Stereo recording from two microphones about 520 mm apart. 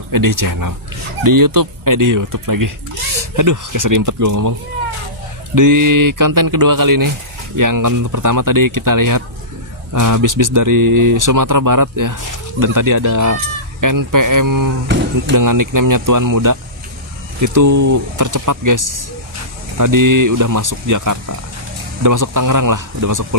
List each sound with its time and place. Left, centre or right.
0.1 s speech: right